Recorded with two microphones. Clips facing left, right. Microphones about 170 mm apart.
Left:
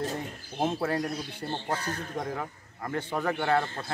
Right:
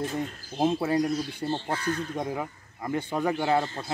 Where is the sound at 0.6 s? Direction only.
15° right (ahead or behind).